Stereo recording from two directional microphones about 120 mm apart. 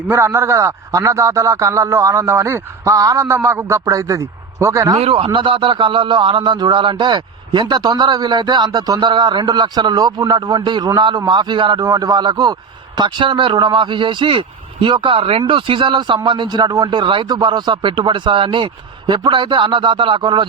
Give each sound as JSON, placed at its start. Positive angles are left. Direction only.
{"t": 0.1, "sound": "a man's voice", "side_deg": -20}
{"t": 4.9, "sound": "speech", "side_deg": -50}